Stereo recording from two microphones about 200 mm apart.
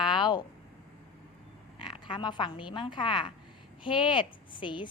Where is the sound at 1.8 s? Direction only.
25° left (ahead or behind).